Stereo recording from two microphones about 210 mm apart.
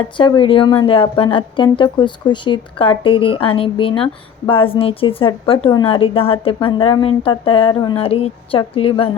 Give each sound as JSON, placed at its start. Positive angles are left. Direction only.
{"t": 0.2, "sound": "a woman's voice", "side_deg": 20}